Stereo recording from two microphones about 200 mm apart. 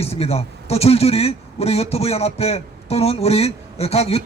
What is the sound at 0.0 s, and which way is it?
Speech, 30° left (ahead or behind).